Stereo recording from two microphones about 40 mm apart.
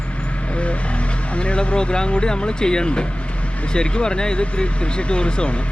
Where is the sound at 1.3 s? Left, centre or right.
Left.